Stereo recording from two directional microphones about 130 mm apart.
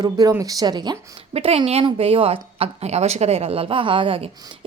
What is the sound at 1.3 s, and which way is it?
A woman's voice, 50° right (ahead or behind).